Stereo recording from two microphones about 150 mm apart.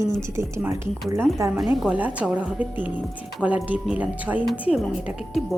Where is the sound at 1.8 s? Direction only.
5° right (ahead or behind).